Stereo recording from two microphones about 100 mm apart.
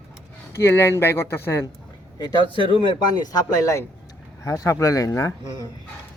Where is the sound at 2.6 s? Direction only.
60° left (ahead or behind).